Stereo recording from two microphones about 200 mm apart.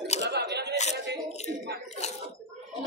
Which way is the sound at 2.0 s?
35° left (ahead or behind).